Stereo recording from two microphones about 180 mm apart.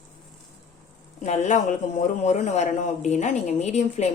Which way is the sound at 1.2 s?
40° left (ahead or behind).